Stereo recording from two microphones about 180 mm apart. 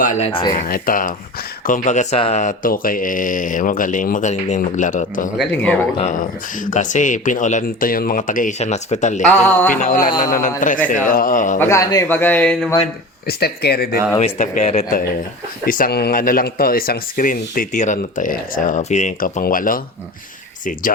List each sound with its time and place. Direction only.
0.0 s speech: 45° left (ahead or behind)
0.3 s speech: 30° left (ahead or behind)
0.5 s speech: 50° left (ahead or behind)
9.2 s a man's voice: 10° left (ahead or behind)
9.8 s speech: 45° left (ahead or behind)
11.6 s a man's voice: 15° left (ahead or behind)
13.2 s speech: 60° left (ahead or behind)
14.2 s speech: 40° left (ahead or behind)
15.6 s speech: 50° left (ahead or behind)